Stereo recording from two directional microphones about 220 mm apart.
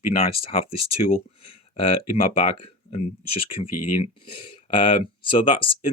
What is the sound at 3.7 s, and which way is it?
Speech, 90° left.